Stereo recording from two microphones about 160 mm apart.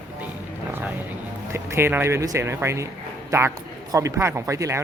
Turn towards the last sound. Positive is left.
turn(degrees=-20)  # may be behind; listen again after turning